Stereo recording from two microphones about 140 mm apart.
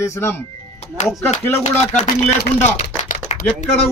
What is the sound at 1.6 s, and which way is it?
Speech, 55° left (ahead or behind).